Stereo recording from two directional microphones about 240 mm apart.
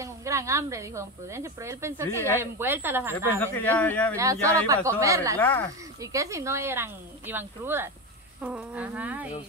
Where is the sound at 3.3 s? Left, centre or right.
Centre.